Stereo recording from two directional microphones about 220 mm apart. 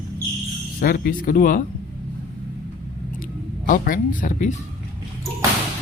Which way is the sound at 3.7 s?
35° left (ahead or behind).